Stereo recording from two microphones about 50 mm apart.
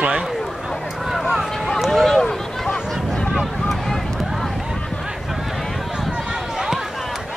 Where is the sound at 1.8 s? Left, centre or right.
Centre.